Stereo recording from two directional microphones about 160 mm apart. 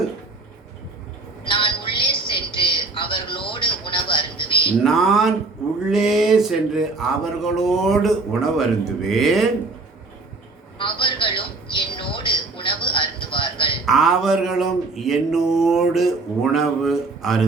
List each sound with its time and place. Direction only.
1.5 s a sound: 30° left (ahead or behind)
4.8 s speech: centre (ahead or behind)
10.8 s television: 30° left (ahead or behind)
13.8 s speech: centre (ahead or behind)